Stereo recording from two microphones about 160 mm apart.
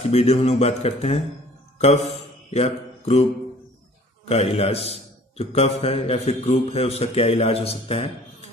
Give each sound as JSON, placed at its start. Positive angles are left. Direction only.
{"t": 0.0, "sound": "a man's voice", "side_deg": 40}
{"t": 2.5, "sound": "speech", "side_deg": 40}
{"t": 4.3, "sound": "a man's voice", "side_deg": 40}